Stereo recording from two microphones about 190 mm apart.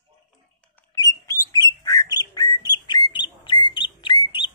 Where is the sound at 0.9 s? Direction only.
15° left (ahead or behind).